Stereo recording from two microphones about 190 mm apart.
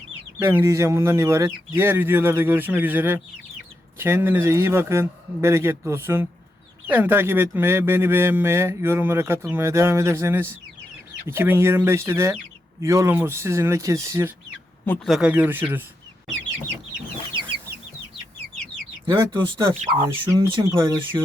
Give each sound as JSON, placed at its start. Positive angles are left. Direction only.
{"t": 0.3, "sound": "speech", "side_deg": -15}
{"t": 14.8, "sound": "speech", "side_deg": 0}
{"t": 19.8, "sound": "speech", "side_deg": -30}
{"t": 20.3, "sound": "speech", "side_deg": -20}